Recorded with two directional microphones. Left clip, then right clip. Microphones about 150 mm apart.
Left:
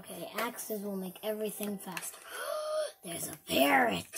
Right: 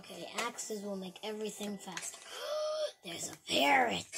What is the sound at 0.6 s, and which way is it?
Speech, 60° left (ahead or behind).